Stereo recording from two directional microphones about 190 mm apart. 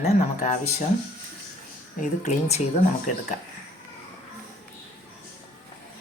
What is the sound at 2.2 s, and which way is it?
Speech, 35° left (ahead or behind).